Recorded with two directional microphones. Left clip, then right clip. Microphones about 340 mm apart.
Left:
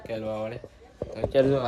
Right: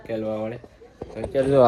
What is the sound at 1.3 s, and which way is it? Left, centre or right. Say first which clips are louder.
Speech: even; left.